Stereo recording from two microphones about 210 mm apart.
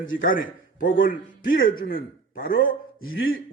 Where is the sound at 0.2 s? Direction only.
40° left (ahead or behind).